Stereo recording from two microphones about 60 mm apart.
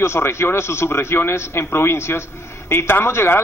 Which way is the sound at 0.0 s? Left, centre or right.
Left.